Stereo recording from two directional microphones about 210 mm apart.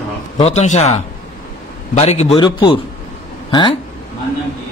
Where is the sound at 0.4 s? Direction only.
30° left (ahead or behind).